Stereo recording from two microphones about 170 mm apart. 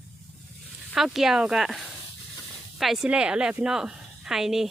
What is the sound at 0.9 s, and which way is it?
A woman's voice, centre (ahead or behind).